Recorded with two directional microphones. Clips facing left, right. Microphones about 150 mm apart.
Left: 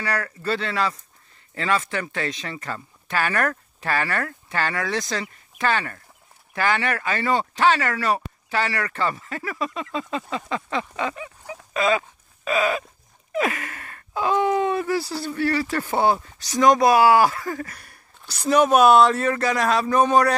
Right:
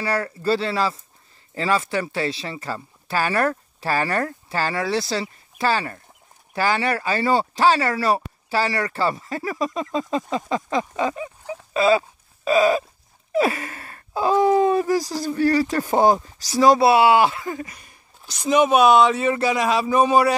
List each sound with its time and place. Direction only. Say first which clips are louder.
0.0 s speech: right 4 dB; 30° right (ahead or behind)
11.7 s dog: right 4 dB; 35° right (ahead or behind)
12.4 s speech: right 5 dB; 35° right (ahead or behind)
15.7 s speech: right 3 dB; 15° right (ahead or behind)
16.3 s speech: left 1 dB; 30° right (ahead or behind)
17.0 s speech: even; 15° right (ahead or behind)
18.4 s a man's voice: even; 5° right (ahead or behind)